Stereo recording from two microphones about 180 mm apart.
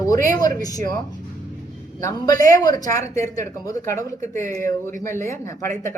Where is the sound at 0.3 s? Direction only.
20° left (ahead or behind).